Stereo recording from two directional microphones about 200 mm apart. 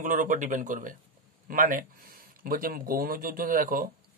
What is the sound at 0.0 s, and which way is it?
Speech, 40° right (ahead or behind).